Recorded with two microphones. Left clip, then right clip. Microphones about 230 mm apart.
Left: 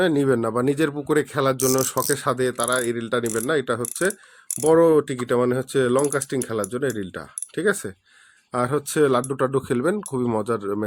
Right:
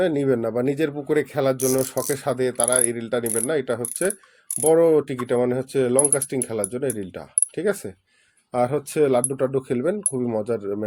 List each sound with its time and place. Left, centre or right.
0.0 s speech: centre